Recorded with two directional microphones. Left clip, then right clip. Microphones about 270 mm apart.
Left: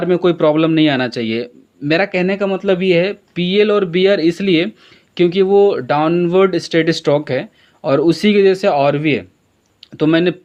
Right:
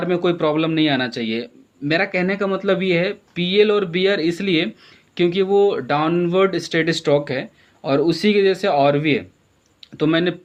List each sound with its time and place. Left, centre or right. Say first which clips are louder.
0.0 s speech: left 6 dB; left